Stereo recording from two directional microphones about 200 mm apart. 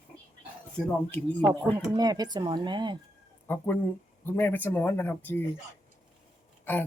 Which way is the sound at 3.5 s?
10° left (ahead or behind).